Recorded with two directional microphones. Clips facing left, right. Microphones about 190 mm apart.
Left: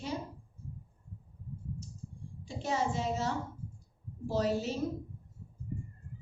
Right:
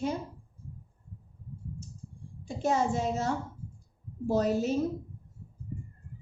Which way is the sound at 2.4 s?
50° right (ahead or behind).